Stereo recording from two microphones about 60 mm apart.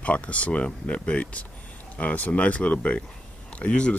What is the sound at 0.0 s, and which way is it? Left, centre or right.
Speech, left.